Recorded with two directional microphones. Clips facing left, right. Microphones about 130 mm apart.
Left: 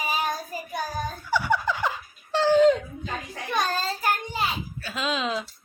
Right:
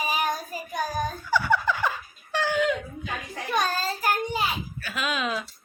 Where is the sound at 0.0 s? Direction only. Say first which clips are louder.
Right 1 dB; 15° right (ahead or behind).